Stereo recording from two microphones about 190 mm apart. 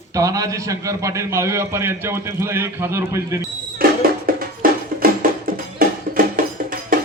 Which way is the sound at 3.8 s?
50° right (ahead or behind).